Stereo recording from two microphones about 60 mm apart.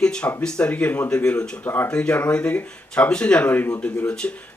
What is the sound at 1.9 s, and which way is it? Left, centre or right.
Speech, centre.